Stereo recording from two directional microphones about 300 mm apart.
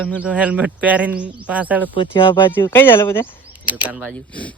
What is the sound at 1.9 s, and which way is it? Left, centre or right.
Speech, centre.